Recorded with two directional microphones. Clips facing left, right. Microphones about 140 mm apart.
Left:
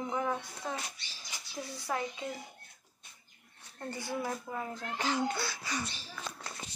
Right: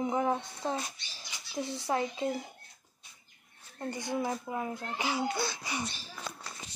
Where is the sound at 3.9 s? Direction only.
20° right (ahead or behind).